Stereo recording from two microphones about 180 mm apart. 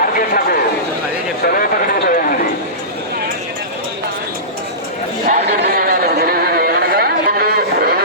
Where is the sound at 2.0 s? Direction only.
50° left (ahead or behind).